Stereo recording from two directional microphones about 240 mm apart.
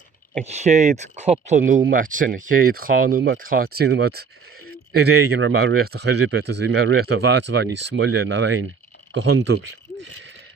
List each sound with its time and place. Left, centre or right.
0.4 s speech: right